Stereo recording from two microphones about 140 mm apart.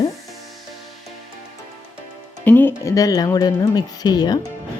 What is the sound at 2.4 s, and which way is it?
Speech, 15° left (ahead or behind).